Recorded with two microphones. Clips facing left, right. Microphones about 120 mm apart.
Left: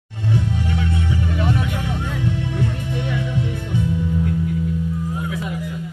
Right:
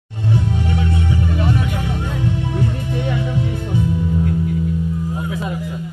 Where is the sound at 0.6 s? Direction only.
25° right (ahead or behind).